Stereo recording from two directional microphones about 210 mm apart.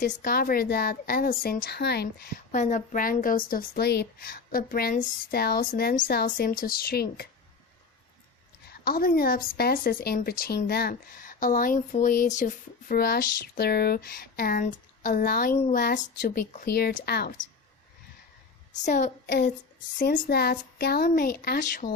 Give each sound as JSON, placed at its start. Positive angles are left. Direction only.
{"t": 0.0, "sound": "speech", "side_deg": 40}
{"t": 8.7, "sound": "speech", "side_deg": 45}
{"t": 15.5, "sound": "speech", "side_deg": 30}
{"t": 15.8, "sound": "speech", "side_deg": 50}
{"t": 18.9, "sound": "child singing", "side_deg": 35}
{"t": 19.3, "sound": "speech", "side_deg": 50}